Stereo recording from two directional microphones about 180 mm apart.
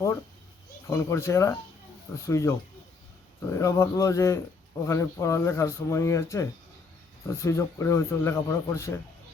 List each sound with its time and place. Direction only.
0.9 s speech: 15° left (ahead or behind)